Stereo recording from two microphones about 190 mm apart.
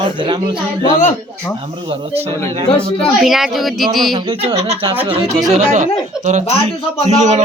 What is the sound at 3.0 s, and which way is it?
A woman's voice, centre (ahead or behind).